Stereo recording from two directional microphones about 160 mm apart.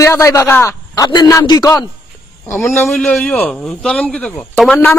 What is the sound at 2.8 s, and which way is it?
Speech, 5° left (ahead or behind).